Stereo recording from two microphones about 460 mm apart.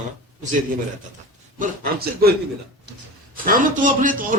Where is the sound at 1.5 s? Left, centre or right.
Centre.